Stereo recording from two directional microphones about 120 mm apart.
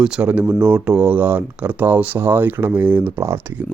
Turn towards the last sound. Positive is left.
turn(degrees=-20)  # may be behind; listen again after turning